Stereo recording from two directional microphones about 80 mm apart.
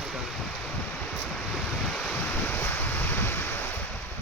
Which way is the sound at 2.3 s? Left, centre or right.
Left.